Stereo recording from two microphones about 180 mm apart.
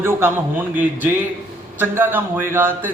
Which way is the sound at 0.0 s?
10° right (ahead or behind).